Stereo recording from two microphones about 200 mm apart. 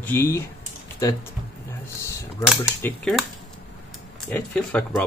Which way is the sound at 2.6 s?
5° left (ahead or behind).